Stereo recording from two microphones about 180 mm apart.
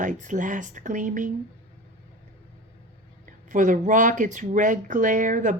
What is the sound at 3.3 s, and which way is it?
Speech, 45° right (ahead or behind).